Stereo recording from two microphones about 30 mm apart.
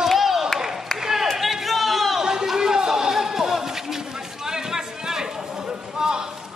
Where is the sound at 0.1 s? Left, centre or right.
Centre.